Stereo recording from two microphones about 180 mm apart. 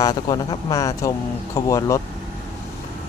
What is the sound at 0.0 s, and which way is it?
Speech, 20° left (ahead or behind).